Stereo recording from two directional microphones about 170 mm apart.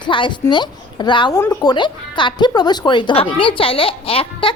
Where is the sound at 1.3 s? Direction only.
15° left (ahead or behind); by 4.5 s 35° left (ahead or behind).